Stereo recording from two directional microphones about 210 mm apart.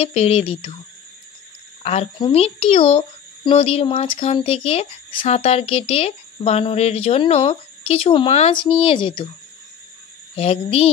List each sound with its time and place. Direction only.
0.0 s a child's voice: 30° left (ahead or behind)
1.8 s a child's voice: 30° left (ahead or behind)
10.3 s a child's voice: 30° left (ahead or behind)